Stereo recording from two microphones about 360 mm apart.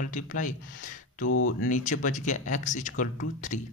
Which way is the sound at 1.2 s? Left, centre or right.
Left.